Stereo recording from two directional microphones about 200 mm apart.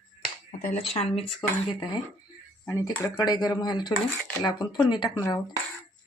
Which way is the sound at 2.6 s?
15° left (ahead or behind).